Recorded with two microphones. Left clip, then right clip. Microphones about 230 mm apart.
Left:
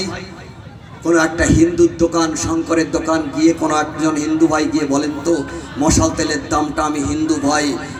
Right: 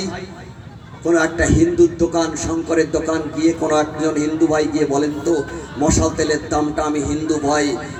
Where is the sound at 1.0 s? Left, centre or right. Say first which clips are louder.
Left 2 dB; left.